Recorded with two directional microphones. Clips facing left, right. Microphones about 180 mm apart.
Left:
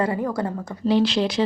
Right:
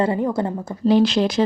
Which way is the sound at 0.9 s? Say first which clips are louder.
Right 3 dB; 45° right (ahead or behind).